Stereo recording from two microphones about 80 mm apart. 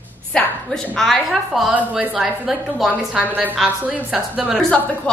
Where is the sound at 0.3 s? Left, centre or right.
Centre.